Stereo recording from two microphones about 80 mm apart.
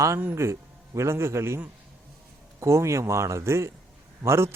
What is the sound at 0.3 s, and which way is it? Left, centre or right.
Speech, right.